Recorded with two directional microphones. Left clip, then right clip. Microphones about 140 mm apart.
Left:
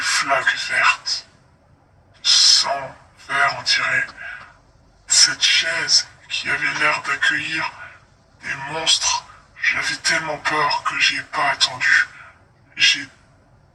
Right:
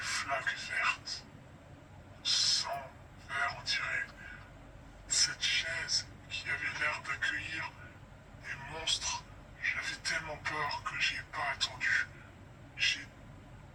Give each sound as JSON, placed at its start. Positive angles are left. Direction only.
{"t": 0.0, "sound": "speech", "side_deg": 90}
{"t": 2.2, "sound": "owl", "side_deg": 90}
{"t": 3.2, "sound": "a man's voice", "side_deg": 90}